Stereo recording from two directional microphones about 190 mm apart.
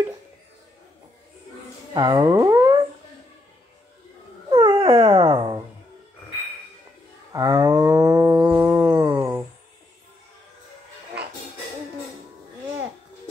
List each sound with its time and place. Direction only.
2.0 s theremin: 20° right (ahead or behind)
4.5 s dog: 25° right (ahead or behind)
7.3 s a sound: 15° right (ahead or behind)